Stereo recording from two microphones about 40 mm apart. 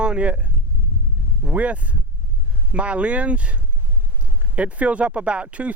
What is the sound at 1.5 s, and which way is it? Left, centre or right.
Speech, right.